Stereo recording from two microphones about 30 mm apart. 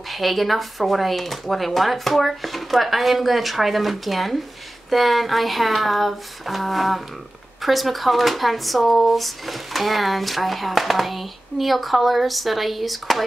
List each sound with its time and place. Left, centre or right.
0.1 s speech: centre